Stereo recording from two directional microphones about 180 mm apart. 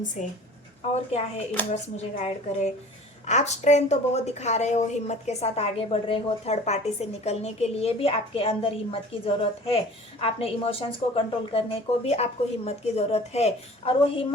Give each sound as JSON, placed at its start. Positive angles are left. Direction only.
{"t": 0.2, "sound": "a woman's voice", "side_deg": 40}
{"t": 1.7, "sound": "a woman's voice", "side_deg": 40}